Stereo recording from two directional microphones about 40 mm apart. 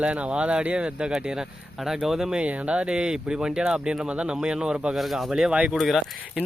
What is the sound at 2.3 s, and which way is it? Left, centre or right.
Speech, right.